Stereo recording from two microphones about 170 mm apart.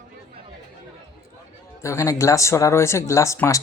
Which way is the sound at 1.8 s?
15° left (ahead or behind).